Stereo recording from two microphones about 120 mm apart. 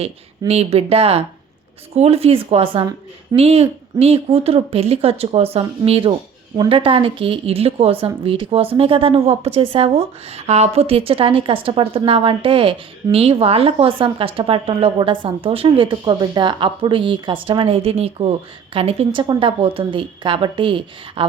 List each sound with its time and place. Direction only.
0.0 s speech: 60° right (ahead or behind)